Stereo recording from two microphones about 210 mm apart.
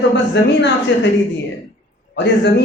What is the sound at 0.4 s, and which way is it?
Speech, 55° left (ahead or behind).